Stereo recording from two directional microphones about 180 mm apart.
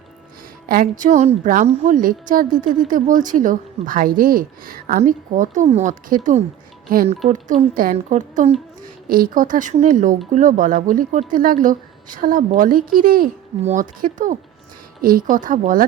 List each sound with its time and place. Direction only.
0.7 s a woman's voice: 50° right (ahead or behind)
7.3 s a woman's voice: 40° right (ahead or behind)